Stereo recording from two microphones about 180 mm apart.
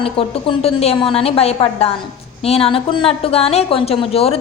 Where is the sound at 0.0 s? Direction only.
30° left (ahead or behind).